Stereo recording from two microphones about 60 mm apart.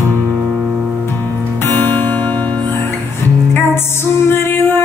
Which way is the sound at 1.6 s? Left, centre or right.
Left.